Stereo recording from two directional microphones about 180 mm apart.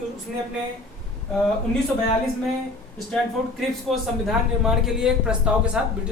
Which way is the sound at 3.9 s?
Centre (ahead or behind).